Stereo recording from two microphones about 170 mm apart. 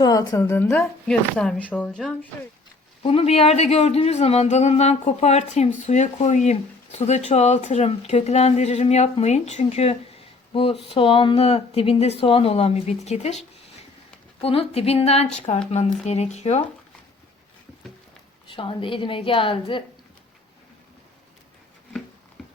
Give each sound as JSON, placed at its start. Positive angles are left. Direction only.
{"t": 0.0, "sound": "speech", "side_deg": 20}
{"t": 3.0, "sound": "speech", "side_deg": 35}
{"t": 14.4, "sound": "speech", "side_deg": 35}
{"t": 18.4, "sound": "speech", "side_deg": 30}
{"t": 22.4, "sound": "a sound", "side_deg": 5}